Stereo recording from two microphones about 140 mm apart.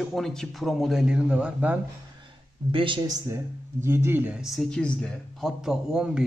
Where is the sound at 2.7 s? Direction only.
35° right (ahead or behind).